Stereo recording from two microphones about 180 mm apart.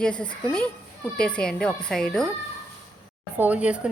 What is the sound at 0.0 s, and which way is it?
Speech, 5° left (ahead or behind).